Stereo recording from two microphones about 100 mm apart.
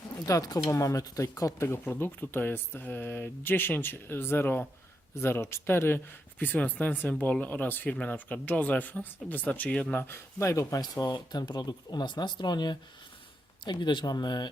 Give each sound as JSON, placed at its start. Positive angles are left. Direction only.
{"t": 0.3, "sound": "speech", "side_deg": 35}
{"t": 1.6, "sound": "speech", "side_deg": 20}